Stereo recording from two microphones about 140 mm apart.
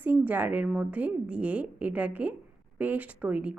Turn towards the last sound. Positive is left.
turn(degrees=-10)  # may be behind; listen again after turning